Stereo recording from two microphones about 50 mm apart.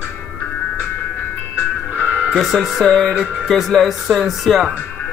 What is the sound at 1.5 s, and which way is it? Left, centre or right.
Music, left.